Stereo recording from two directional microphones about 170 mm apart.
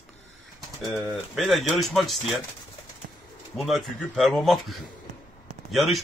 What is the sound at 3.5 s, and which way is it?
A man's voice, centre (ahead or behind).